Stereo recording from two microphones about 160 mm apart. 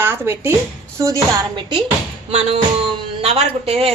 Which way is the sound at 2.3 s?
35° right (ahead or behind).